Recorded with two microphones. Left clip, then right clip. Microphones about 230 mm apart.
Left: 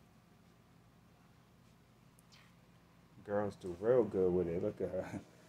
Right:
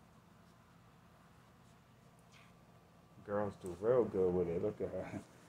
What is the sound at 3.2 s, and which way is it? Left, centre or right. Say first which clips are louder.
Speech: left 1 dB; centre.